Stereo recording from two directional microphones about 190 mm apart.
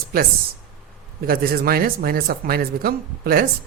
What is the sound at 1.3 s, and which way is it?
Speech, 50° right (ahead or behind).